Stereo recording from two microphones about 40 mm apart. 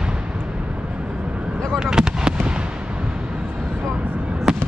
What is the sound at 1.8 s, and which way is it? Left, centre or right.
Fireworks, centre.